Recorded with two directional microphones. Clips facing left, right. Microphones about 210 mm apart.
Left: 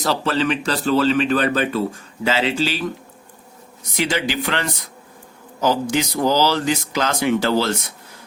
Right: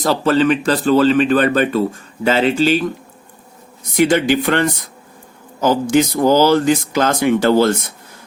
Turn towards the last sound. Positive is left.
turn(degrees=-50)  # may be behind; listen again after turning